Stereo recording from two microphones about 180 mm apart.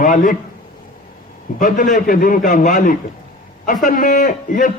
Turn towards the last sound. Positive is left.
turn(degrees=45)  # may be behind; listen again after turning